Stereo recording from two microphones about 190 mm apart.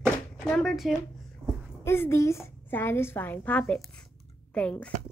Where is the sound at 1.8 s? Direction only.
15° left (ahead or behind).